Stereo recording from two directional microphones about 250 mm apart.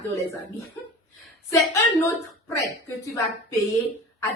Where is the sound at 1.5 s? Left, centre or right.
Centre.